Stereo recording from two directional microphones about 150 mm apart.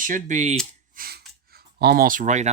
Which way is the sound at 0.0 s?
60° right (ahead or behind).